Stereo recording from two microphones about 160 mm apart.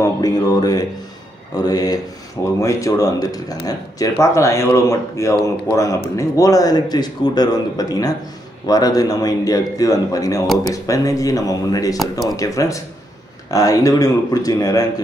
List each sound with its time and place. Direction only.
0.0 s speech: 25° left (ahead or behind)